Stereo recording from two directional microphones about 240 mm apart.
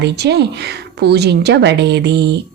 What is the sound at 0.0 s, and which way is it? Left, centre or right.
A woman's voice, right.